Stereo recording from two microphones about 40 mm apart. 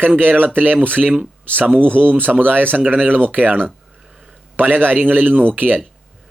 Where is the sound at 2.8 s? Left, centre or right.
Right.